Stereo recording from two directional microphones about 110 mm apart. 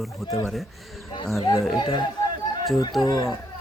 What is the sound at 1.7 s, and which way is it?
Speech, 40° left (ahead or behind).